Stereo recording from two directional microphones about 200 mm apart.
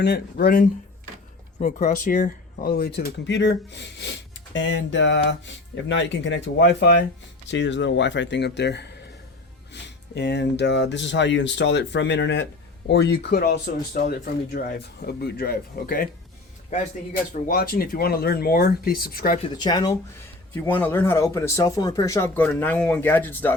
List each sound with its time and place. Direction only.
0.0 s speech: 55° left (ahead or behind)
19.4 s speech: 20° left (ahead or behind)
20.7 s speech: 10° left (ahead or behind)